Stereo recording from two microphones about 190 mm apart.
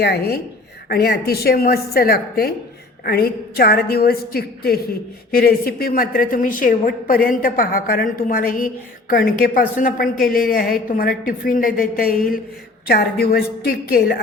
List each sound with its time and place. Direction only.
0.0 s a woman's voice: 55° left (ahead or behind)